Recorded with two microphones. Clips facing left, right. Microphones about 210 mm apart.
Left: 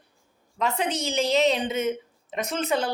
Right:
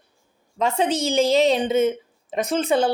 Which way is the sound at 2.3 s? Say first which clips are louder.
Right 6 dB; 30° right (ahead or behind).